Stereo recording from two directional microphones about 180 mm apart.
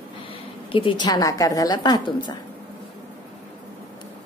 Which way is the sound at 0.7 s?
25° left (ahead or behind).